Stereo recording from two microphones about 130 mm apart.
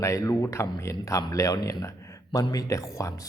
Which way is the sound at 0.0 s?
25° left (ahead or behind).